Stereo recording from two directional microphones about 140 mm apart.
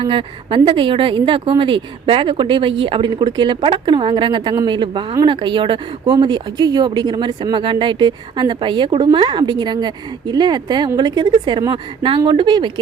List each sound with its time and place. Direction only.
0.0 s speech: 40° right (ahead or behind)